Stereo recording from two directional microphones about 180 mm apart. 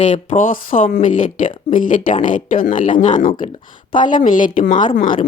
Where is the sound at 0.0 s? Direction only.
45° left (ahead or behind).